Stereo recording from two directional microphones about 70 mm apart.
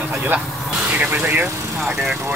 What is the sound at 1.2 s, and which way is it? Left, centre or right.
Speech, right.